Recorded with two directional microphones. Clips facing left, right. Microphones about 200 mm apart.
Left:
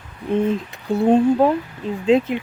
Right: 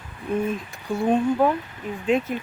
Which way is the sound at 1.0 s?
25° left (ahead or behind).